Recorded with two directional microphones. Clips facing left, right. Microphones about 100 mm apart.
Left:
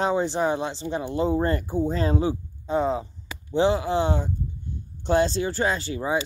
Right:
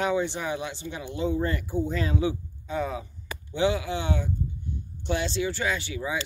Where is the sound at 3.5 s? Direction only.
35° left (ahead or behind).